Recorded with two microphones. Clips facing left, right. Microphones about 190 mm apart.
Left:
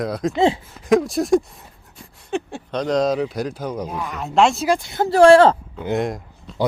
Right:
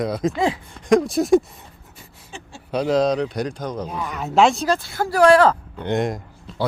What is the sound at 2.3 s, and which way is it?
Speech, 60° left (ahead or behind).